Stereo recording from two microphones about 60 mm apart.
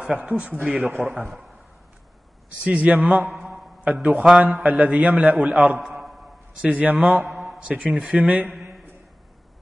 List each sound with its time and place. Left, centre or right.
0.0 s a man's voice: right
1.0 s a man's voice: right
2.6 s a man's voice: right
3.3 s a man's voice: centre
3.8 s a man's voice: right
5.8 s a sound: centre
6.6 s a man's voice: right
7.2 s a sound: centre
7.6 s a man's voice: centre